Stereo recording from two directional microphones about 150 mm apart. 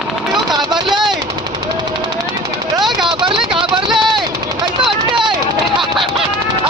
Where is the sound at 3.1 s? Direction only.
35° right (ahead or behind).